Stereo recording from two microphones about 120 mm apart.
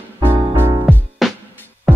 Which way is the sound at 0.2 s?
20° right (ahead or behind).